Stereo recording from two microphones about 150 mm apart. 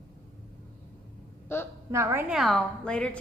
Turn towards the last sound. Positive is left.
turn(degrees=5)  # may be behind; listen again after turning